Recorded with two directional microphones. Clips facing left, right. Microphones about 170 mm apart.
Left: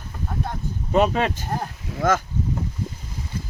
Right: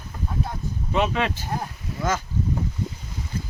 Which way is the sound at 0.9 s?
40° left (ahead or behind).